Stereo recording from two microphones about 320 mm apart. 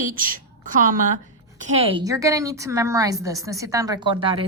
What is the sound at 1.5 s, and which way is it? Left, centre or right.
A woman's voice, centre.